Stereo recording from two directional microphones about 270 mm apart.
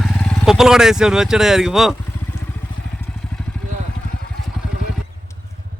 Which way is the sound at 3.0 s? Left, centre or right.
Centre.